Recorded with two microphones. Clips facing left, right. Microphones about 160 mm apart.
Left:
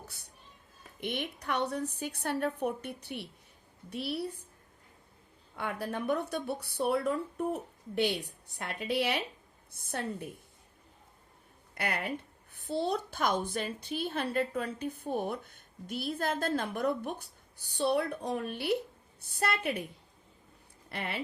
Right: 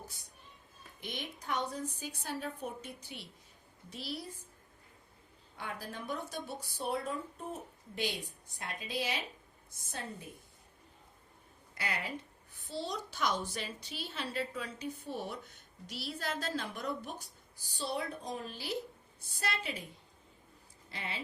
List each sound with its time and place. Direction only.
1.0 s a woman's voice: 65° left (ahead or behind)
5.5 s a woman's voice: 60° left (ahead or behind)
11.7 s a woman's voice: 60° left (ahead or behind)
20.9 s a woman's voice: 60° left (ahead or behind)